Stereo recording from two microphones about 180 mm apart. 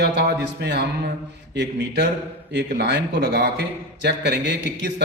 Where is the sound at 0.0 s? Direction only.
70° right (ahead or behind).